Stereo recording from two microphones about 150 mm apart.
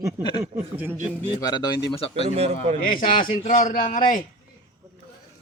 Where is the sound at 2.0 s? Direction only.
40° left (ahead or behind).